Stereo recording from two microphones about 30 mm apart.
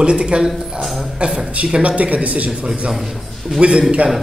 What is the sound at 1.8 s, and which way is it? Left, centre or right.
Speech, right.